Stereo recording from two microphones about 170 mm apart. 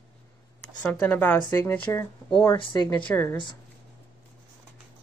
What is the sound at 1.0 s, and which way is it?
Speech, 10° left (ahead or behind).